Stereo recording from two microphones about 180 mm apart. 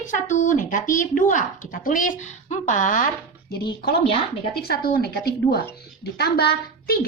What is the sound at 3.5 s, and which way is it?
A woman's voice, 60° left (ahead or behind).